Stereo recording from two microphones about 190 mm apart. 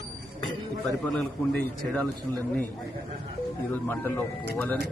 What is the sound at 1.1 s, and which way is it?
Speech, 5° left (ahead or behind).